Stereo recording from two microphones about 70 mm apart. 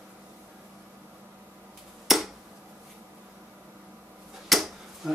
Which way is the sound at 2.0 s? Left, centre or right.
Centre.